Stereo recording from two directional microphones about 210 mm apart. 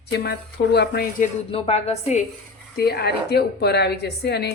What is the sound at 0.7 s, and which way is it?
Speech, 50° left (ahead or behind).